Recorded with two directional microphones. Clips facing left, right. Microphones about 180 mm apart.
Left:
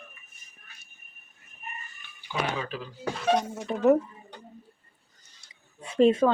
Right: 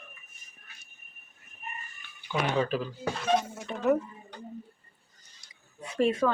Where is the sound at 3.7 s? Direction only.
35° left (ahead or behind).